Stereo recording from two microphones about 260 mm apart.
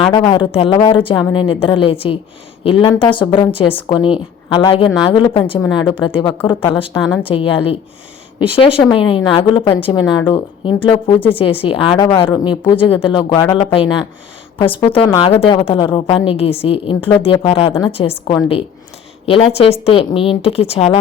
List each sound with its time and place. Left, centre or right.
0.0 s a woman's voice: centre
6.3 s speech: centre
6.7 s a woman's voice: left
7.0 s speech: centre
7.3 s a woman's voice: left